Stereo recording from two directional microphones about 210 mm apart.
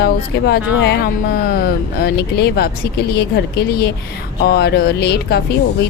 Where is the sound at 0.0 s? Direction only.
50° left (ahead or behind).